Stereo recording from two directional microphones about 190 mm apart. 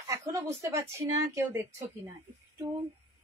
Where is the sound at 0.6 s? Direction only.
15° right (ahead or behind).